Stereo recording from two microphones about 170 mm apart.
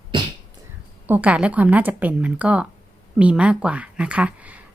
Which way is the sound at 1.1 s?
5° right (ahead or behind).